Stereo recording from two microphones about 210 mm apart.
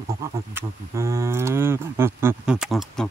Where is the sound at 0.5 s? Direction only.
15° right (ahead or behind).